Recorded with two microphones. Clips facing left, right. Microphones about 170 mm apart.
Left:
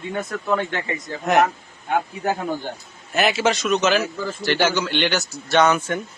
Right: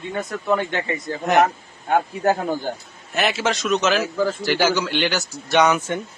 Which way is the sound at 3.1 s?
Centre (ahead or behind).